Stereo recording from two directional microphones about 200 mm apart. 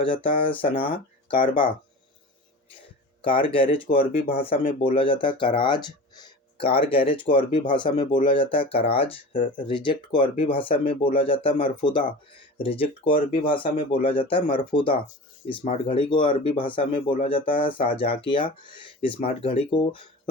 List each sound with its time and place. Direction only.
0.0 s speech: 25° left (ahead or behind)
3.2 s speech: 25° left (ahead or behind)